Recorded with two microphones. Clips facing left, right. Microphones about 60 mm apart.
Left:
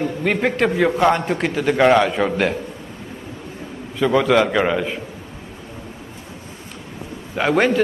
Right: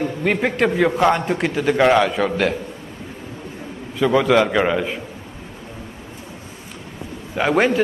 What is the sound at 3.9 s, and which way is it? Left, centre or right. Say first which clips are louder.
A man's voice: even; centre.